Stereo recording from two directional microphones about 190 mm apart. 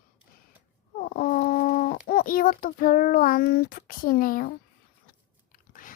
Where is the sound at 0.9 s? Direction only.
45° left (ahead or behind).